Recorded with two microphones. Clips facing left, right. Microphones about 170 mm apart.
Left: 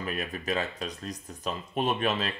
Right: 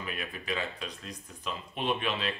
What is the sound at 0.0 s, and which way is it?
Speech, 40° left (ahead or behind).